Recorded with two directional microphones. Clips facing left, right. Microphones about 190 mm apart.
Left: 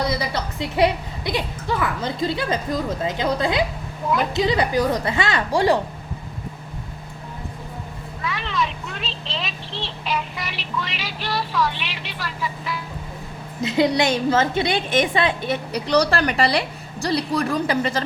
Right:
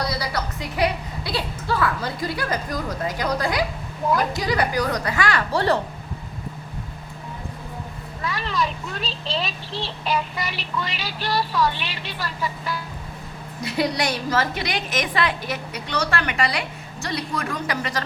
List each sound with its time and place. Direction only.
0.1 s a woman's voice: 25° left (ahead or behind)
8.3 s a sound: centre (ahead or behind)
9.0 s speech: centre (ahead or behind)
13.6 s a woman's voice: 20° left (ahead or behind)
15.7 s a woman's voice: 35° left (ahead or behind)